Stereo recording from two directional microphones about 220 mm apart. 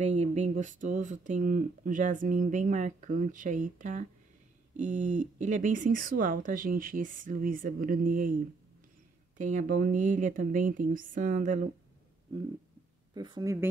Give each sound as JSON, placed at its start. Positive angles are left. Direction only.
{"t": 0.0, "sound": "speech", "side_deg": -30}
{"t": 9.4, "sound": "speech", "side_deg": -35}
{"t": 13.1, "sound": "speech", "side_deg": -20}